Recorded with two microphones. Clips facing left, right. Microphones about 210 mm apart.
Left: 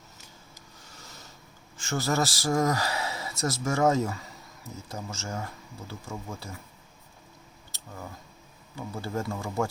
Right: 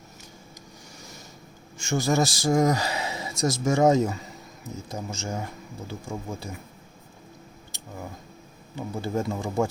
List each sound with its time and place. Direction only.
0.9 s a sound: 15° right (ahead or behind)
1.8 s speech: 15° right (ahead or behind)
8.7 s speech: 20° right (ahead or behind)